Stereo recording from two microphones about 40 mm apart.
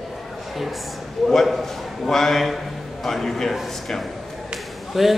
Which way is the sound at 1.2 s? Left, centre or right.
Centre.